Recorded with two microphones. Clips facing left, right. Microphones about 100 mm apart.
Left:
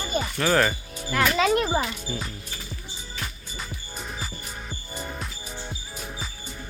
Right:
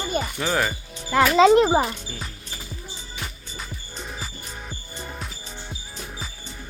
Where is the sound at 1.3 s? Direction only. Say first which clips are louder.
Right 10 dB; 25° right (ahead or behind).